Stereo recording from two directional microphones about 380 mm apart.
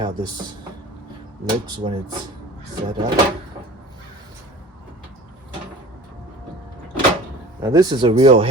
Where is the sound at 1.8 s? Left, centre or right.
Centre.